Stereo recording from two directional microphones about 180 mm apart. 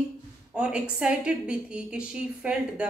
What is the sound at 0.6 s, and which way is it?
A woman's voice, 5° right (ahead or behind).